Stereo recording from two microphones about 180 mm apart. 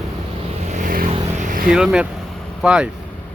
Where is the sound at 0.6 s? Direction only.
45° right (ahead or behind).